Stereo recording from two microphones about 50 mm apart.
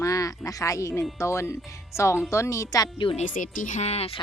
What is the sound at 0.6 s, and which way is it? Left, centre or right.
Speech, left.